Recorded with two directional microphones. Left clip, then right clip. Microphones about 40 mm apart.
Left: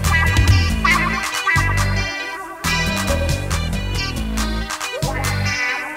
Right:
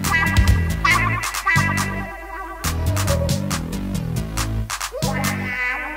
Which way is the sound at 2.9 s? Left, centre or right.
Left.